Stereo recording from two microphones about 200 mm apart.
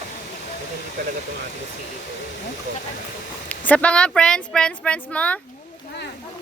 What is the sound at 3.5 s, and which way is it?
Speech, 5° left (ahead or behind).